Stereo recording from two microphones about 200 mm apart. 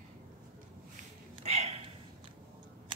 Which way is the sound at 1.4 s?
30° right (ahead or behind).